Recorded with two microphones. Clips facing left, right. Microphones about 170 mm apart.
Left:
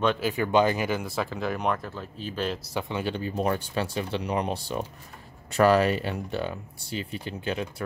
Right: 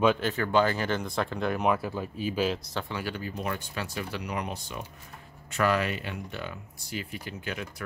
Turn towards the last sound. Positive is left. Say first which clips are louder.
# left 5 dB
turn(degrees=30)  # may be behind; listen again after turning